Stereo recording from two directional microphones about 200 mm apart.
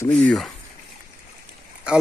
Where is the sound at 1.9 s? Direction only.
5° right (ahead or behind).